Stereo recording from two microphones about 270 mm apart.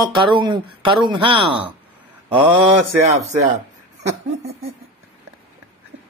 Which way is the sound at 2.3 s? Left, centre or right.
Right.